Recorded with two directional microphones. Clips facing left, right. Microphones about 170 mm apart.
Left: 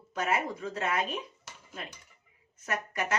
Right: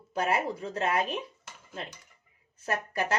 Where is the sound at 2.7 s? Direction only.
35° right (ahead or behind).